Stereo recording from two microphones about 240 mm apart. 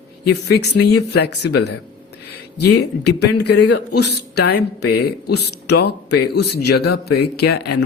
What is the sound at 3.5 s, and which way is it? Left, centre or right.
Speech, left.